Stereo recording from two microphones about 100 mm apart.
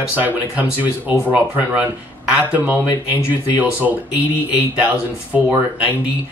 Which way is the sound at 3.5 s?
15° right (ahead or behind).